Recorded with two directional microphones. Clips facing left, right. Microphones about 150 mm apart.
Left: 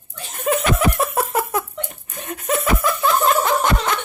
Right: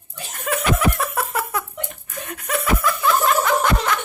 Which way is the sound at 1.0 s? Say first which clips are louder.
Left 4 dB; 25° left (ahead or behind).